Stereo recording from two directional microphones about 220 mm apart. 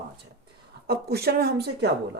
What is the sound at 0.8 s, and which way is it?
Speech, 45° right (ahead or behind).